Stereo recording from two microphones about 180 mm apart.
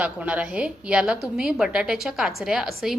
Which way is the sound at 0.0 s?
5° right (ahead or behind).